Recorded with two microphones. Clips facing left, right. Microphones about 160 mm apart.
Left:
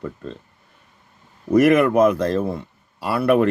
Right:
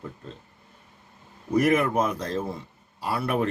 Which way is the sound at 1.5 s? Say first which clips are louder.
Left 7 dB; 70° left (ahead or behind).